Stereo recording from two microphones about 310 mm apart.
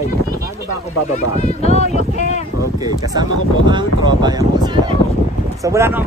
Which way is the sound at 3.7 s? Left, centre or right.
Centre.